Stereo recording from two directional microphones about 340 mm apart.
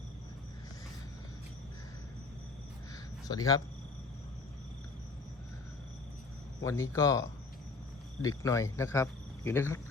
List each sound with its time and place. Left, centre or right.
3.2 s speech: centre
6.7 s speech: centre